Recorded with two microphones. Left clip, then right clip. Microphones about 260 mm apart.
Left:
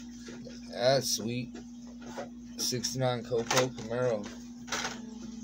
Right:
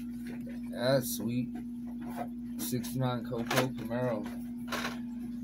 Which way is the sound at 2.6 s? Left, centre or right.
Left.